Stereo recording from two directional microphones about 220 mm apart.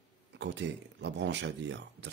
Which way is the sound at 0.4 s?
55° right (ahead or behind).